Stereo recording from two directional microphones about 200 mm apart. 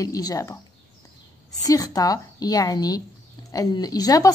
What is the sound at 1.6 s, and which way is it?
A woman's voice, 20° left (ahead or behind).